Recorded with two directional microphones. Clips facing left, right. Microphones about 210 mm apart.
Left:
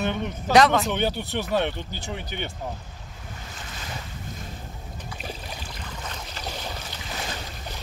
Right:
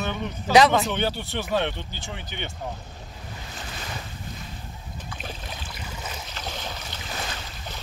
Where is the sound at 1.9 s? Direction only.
40° left (ahead or behind).